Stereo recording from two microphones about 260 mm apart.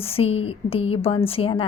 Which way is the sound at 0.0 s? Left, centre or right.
Left.